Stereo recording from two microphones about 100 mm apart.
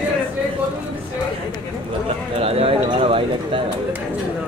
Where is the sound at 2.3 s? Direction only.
75° right (ahead or behind).